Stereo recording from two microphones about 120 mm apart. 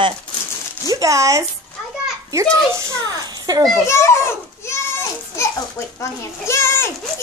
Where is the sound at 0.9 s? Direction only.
25° right (ahead or behind).